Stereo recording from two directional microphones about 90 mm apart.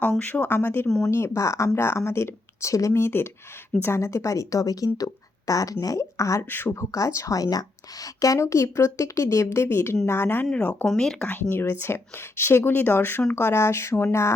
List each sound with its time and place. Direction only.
0.0 s speech: 15° left (ahead or behind)
0.9 s speech: 5° left (ahead or behind)
1.1 s speech: 30° left (ahead or behind)
10.4 s speech: 15° left (ahead or behind)
10.8 s speech: 5° left (ahead or behind)
11.3 s speech: 20° left (ahead or behind)